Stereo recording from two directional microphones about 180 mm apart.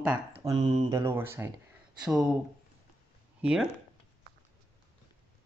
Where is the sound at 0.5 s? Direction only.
25° right (ahead or behind).